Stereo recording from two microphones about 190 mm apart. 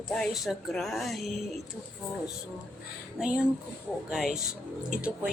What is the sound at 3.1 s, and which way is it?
Speech, 5° right (ahead or behind).